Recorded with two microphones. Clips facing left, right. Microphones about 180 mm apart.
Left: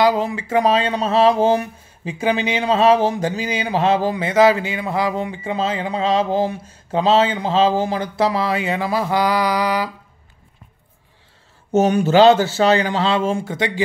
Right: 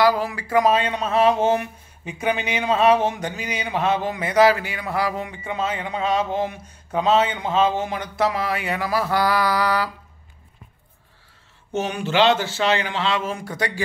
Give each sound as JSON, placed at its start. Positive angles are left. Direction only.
{"t": 0.0, "sound": "speech", "side_deg": 25}
{"t": 11.7, "sound": "speech", "side_deg": 40}